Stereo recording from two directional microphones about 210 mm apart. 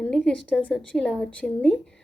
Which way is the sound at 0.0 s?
5° left (ahead or behind).